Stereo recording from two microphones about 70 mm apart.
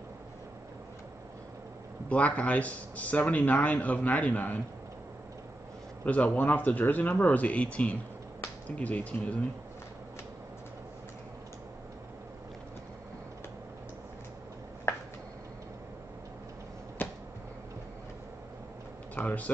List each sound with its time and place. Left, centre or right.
2.0 s a man's voice: centre
6.0 s a man's voice: left
17.0 s a sound: left
19.1 s speech: left